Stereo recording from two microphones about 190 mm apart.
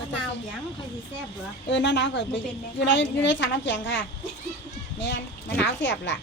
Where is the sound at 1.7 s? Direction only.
70° left (ahead or behind).